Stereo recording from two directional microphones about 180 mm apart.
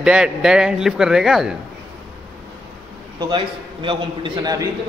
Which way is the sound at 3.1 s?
25° right (ahead or behind).